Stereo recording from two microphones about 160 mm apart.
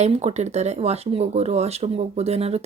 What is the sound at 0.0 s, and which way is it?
Speech, 45° right (ahead or behind).